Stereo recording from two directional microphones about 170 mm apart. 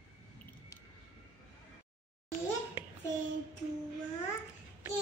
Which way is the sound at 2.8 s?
15° right (ahead or behind).